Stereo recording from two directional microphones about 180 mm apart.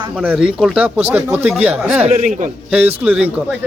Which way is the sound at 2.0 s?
45° right (ahead or behind).